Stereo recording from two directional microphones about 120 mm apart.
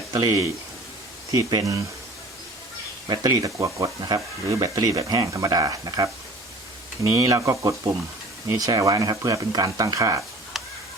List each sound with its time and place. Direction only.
0.1 s speech: 30° right (ahead or behind)
3.1 s speech: 30° right (ahead or behind)
10.5 s a sound: centre (ahead or behind)